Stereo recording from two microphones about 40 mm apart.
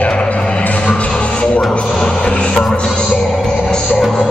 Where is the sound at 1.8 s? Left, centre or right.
Centre.